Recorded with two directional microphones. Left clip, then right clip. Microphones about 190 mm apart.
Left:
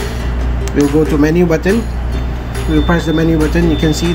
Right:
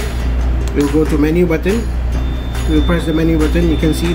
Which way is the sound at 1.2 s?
25° left (ahead or behind).